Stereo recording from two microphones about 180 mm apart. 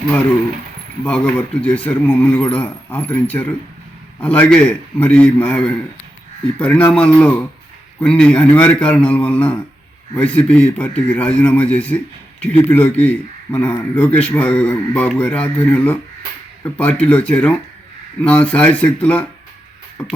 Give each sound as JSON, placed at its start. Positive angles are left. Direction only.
{"t": 1.0, "sound": "a man's voice", "side_deg": 5}